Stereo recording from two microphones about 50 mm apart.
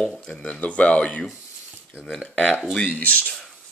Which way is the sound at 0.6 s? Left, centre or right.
Left.